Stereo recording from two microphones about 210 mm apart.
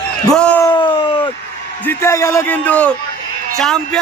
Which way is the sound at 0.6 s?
20° left (ahead or behind).